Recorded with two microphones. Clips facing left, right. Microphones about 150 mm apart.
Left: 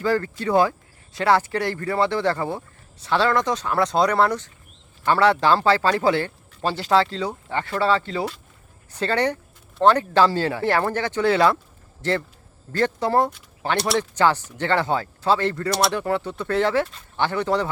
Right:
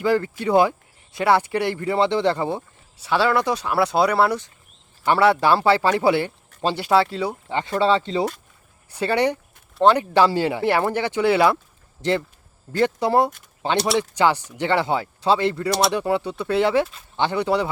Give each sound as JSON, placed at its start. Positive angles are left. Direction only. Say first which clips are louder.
{"t": 0.0, "sound": "speech", "louder": "right 2 dB", "side_deg": -15}
{"t": 13.7, "sound": "speech", "louder": "right 2 dB", "side_deg": 0}
{"t": 14.0, "sound": "speech", "louder": "even", "side_deg": -15}